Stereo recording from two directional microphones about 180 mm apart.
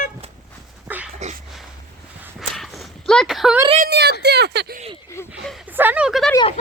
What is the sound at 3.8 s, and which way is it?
Speech, 65° right (ahead or behind).